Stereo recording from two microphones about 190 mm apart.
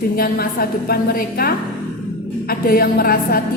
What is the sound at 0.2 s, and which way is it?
A woman's voice, 50° left (ahead or behind).